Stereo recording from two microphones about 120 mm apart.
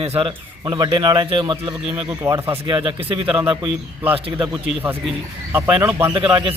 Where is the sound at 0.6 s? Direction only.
35° right (ahead or behind).